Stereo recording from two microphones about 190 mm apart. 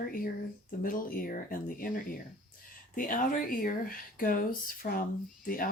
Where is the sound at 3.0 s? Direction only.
45° left (ahead or behind).